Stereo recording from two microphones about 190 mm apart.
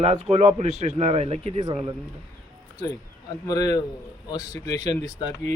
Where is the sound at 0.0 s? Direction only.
35° right (ahead or behind).